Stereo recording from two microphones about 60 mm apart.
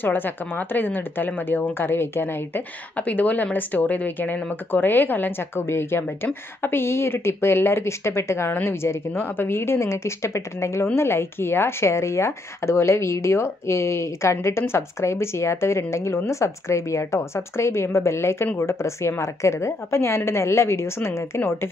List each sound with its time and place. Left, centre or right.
0.0 s a woman's voice: left
5.6 s a woman's voice: left
8.8 s a woman's voice: left